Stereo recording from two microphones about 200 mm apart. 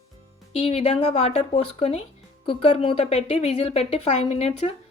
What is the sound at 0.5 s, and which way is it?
Speech, 30° left (ahead or behind).